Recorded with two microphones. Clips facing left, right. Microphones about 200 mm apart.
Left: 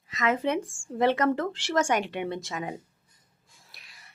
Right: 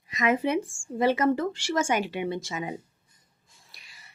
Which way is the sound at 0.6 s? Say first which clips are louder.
Left 1 dB; 15° left (ahead or behind).